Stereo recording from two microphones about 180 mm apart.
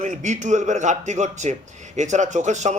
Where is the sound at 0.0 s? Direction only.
40° right (ahead or behind).